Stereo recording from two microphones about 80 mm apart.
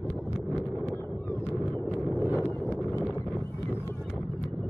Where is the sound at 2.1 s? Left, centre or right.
Centre.